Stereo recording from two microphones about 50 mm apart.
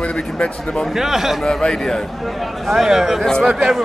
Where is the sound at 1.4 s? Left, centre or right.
Centre.